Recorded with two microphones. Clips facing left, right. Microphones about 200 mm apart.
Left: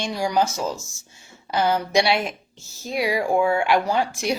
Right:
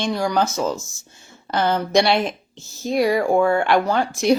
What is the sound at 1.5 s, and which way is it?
Speech, 10° left (ahead or behind).